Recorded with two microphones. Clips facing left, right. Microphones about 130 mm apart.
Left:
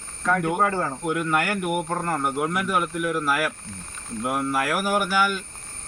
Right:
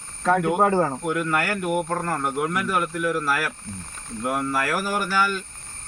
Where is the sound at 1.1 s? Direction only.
20° left (ahead or behind).